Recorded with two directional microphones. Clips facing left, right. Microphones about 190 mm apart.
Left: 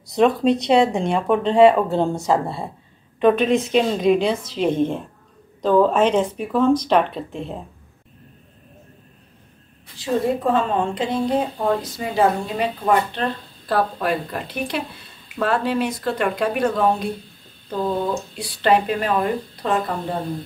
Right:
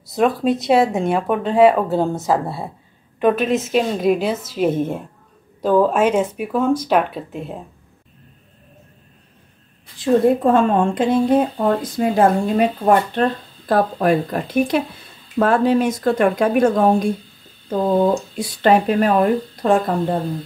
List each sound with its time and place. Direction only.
0.1 s speech: centre (ahead or behind)
9.9 s a woman's voice: 50° right (ahead or behind)
18.3 s a woman's voice: 50° right (ahead or behind)